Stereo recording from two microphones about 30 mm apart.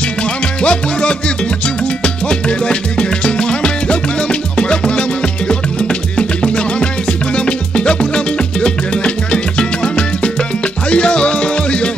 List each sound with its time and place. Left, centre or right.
0.2 s music: left
2.2 s music: left